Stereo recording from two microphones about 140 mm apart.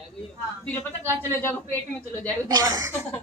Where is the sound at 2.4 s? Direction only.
25° right (ahead or behind).